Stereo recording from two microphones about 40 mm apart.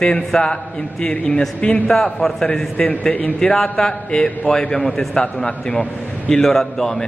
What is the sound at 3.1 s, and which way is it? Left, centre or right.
Speech, left.